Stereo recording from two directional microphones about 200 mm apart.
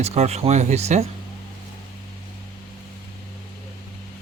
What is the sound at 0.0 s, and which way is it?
Speech, 30° right (ahead or behind).